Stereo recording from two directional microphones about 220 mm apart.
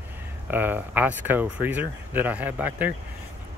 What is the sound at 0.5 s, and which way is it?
Speech, 10° right (ahead or behind).